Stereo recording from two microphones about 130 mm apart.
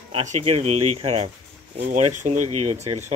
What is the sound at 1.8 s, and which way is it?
Speech, 75° right (ahead or behind).